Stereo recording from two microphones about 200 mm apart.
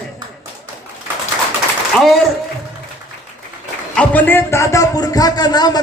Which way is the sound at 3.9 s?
5° left (ahead or behind).